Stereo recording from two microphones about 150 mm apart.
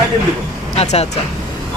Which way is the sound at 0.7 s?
45° left (ahead or behind).